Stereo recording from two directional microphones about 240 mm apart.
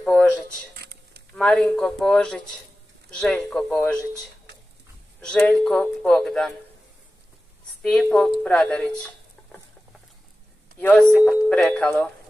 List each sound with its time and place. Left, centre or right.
0.0 s speech: centre
0.7 s a sound: right
1.3 s speech: centre
7.8 s speech: centre
10.8 s speech: centre